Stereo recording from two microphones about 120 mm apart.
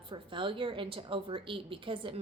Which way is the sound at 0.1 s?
45° right (ahead or behind).